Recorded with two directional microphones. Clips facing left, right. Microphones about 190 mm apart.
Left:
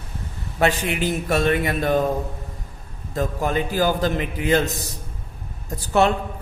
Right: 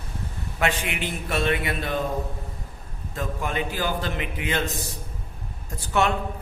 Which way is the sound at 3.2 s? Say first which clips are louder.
Left 6 dB; 40° left (ahead or behind).